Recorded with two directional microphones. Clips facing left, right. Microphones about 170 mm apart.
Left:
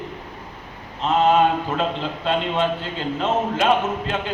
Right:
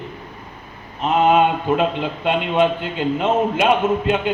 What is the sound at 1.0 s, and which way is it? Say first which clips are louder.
A man's voice: right 2 dB; 15° right (ahead or behind).